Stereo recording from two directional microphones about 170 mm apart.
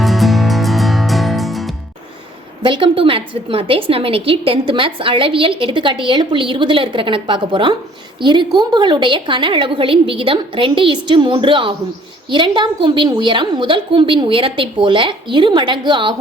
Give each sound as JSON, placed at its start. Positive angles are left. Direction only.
{"t": 0.0, "sound": "music", "side_deg": 0}
{"t": 2.6, "sound": "a woman's voice", "side_deg": -30}